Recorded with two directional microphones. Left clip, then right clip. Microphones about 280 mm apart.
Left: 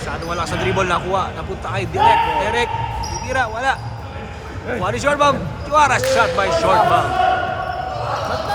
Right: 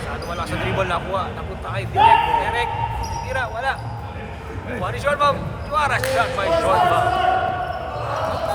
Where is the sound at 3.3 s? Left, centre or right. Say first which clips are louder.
Left 5 dB; left.